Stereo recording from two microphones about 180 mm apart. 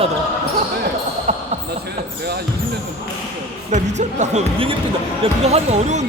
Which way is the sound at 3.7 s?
40° right (ahead or behind).